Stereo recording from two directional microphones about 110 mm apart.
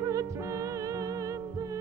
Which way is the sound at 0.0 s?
30° right (ahead or behind).